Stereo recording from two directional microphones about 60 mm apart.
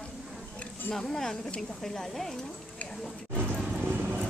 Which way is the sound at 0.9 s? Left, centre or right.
Centre.